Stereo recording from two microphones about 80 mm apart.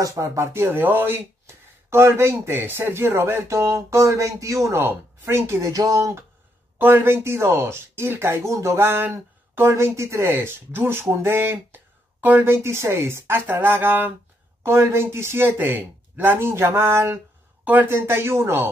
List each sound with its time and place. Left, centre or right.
0.0 s speech: right
6.8 s speech: right